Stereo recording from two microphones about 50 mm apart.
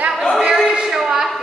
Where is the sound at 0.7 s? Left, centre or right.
Centre.